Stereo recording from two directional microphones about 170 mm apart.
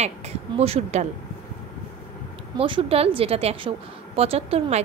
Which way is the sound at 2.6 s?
30° right (ahead or behind).